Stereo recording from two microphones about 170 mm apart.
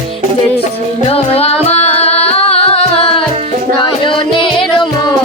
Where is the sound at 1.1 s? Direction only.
35° left (ahead or behind).